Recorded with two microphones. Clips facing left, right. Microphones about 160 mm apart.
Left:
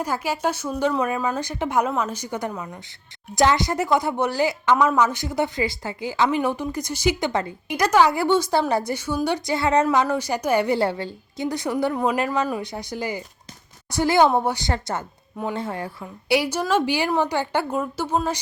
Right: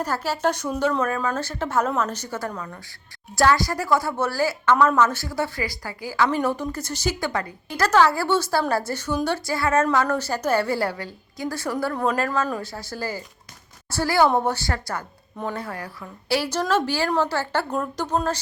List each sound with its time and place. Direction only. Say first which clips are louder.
0.0 s a woman's voice: even; 10° left (ahead or behind)